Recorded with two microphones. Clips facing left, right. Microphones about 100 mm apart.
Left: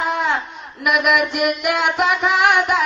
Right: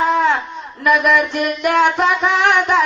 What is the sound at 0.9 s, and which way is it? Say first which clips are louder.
Speech: right 3 dB; 15° left (ahead or behind).